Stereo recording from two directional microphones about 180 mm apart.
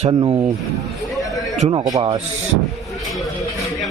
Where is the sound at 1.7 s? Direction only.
20° right (ahead or behind).